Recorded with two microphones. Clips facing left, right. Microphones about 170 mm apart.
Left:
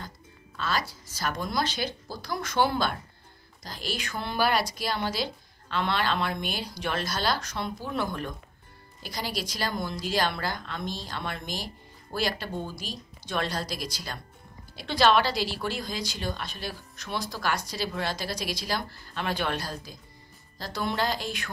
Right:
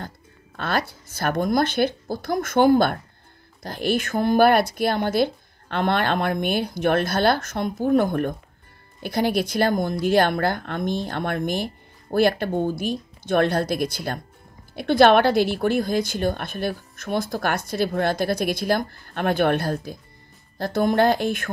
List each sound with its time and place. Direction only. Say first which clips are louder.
0.6 s speech: right 5 dB; 55° right (ahead or behind)